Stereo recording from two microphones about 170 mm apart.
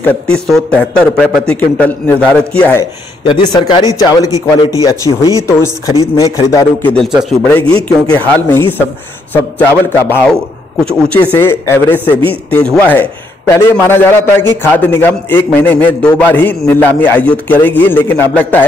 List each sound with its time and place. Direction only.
0.0 s a man's voice: 5° left (ahead or behind)
3.3 s a man's voice: 30° left (ahead or behind)
6.9 s a man's voice: 5° left (ahead or behind)